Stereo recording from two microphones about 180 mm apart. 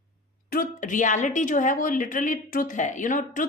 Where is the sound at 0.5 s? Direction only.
50° left (ahead or behind).